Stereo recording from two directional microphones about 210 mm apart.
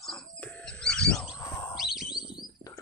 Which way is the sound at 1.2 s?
20° left (ahead or behind).